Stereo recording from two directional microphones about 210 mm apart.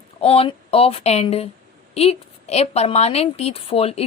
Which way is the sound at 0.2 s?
30° left (ahead or behind).